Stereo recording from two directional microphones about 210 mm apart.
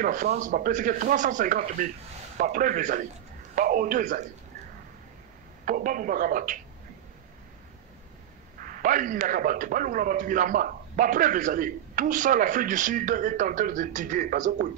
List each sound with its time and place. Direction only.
0.0 s a man's voice: 40° right (ahead or behind)
5.7 s a man's voice: 40° right (ahead or behind)
8.8 s a man's voice: 40° right (ahead or behind)